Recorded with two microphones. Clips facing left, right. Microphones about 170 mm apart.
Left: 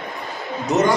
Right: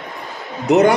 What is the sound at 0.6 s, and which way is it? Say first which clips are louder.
Speech: right 6 dB; 65° right (ahead or behind).